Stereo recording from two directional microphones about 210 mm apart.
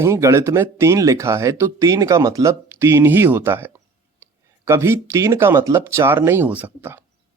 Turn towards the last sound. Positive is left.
turn(degrees=-10)  # may be behind; listen again after turning